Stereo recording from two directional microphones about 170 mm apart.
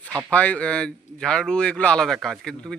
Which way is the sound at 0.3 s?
10° left (ahead or behind).